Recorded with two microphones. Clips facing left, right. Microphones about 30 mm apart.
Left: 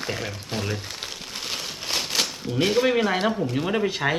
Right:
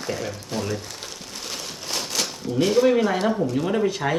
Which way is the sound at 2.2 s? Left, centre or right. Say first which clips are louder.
Right 4 dB; left.